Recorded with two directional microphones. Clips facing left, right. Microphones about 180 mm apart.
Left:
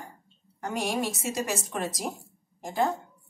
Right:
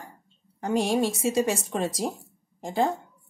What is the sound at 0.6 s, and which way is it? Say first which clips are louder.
Speech: right 5 dB; 30° right (ahead or behind).